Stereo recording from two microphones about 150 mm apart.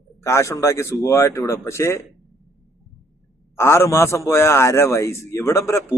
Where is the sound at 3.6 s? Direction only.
15° left (ahead or behind).